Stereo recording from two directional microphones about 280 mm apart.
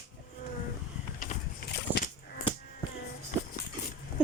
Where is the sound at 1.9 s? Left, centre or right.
Left.